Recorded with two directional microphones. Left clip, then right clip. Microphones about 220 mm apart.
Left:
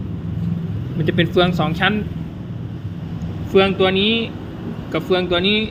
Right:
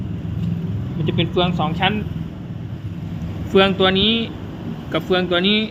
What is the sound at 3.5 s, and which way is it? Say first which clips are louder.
Speech: even; 10° right (ahead or behind).